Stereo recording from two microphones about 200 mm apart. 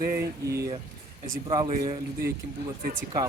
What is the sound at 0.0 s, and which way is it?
Speech, 45° right (ahead or behind).